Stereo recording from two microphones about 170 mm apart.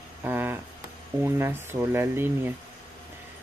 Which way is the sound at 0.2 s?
10° right (ahead or behind).